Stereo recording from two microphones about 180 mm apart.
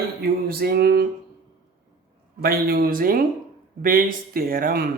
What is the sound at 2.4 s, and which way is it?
Speech, 60° right (ahead or behind).